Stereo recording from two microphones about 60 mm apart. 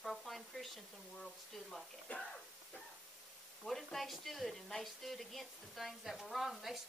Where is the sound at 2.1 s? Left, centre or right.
Left.